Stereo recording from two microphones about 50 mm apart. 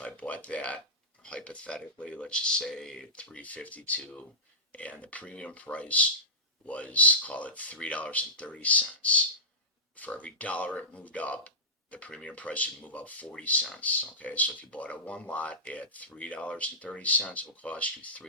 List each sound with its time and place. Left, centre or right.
0.0 s speech: left; by 3.1 s centre
3.2 s speech: left